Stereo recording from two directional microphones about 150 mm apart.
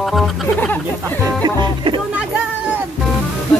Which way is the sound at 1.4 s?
30° right (ahead or behind).